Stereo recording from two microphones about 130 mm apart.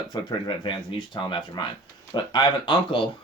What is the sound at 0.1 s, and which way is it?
Speech, 35° left (ahead or behind).